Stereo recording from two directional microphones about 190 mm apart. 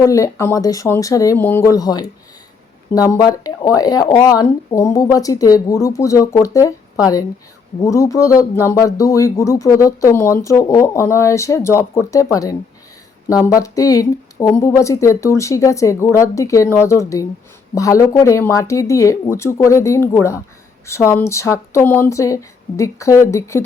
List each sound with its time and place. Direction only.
0.0 s speech: 15° left (ahead or behind)
7.8 s speech: 15° left (ahead or behind)